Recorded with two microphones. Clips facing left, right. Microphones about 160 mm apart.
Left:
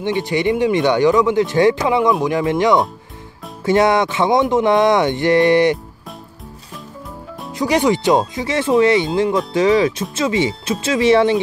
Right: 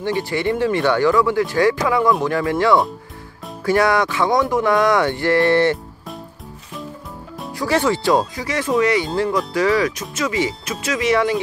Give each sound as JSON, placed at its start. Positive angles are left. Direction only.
{"t": 0.0, "sound": "speech", "side_deg": 20}
{"t": 7.5, "sound": "speech", "side_deg": 15}